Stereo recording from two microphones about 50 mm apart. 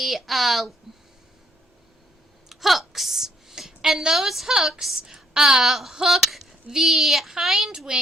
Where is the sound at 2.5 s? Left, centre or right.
Centre.